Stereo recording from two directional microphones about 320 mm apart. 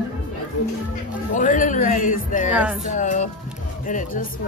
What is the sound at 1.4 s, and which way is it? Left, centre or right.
Speech, left.